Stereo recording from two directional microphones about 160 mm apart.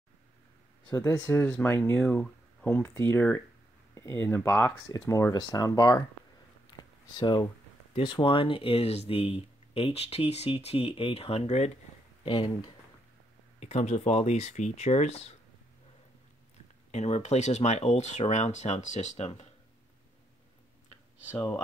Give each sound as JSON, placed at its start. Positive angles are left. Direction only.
{"t": 0.9, "sound": "speech", "side_deg": 10}
{"t": 6.8, "sound": "a sound", "side_deg": 25}
{"t": 7.9, "sound": "speech", "side_deg": 30}
{"t": 12.3, "sound": "speech", "side_deg": 25}
{"t": 13.6, "sound": "speech", "side_deg": 45}
{"t": 16.9, "sound": "speech", "side_deg": 45}